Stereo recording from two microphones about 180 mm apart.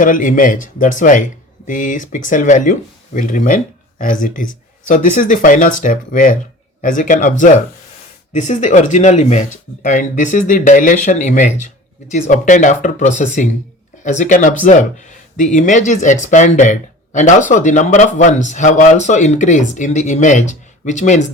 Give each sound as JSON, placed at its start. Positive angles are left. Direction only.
{"t": 0.0, "sound": "speech", "side_deg": 45}